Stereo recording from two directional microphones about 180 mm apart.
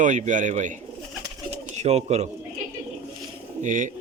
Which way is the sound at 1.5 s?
40° right (ahead or behind).